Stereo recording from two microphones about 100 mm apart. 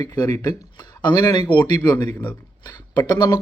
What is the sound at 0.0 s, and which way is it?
Speech, 40° left (ahead or behind).